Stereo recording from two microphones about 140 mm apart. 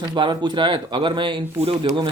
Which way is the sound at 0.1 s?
35° right (ahead or behind).